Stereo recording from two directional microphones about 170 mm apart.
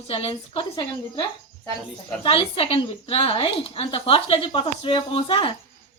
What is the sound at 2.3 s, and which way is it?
A woman's voice, 35° left (ahead or behind).